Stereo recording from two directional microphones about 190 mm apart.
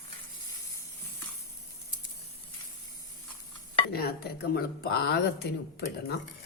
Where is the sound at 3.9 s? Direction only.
55° left (ahead or behind).